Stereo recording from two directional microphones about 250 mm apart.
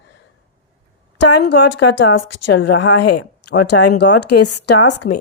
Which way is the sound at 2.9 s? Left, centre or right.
Left.